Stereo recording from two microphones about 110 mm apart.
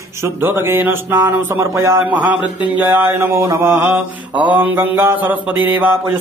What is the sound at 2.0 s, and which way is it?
Mantra, 15° right (ahead or behind).